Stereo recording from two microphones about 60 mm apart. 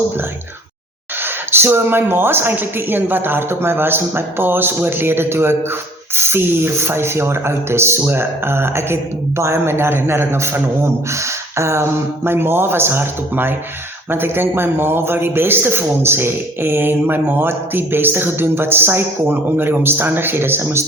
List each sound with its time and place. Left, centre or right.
1.2 s a man's voice: right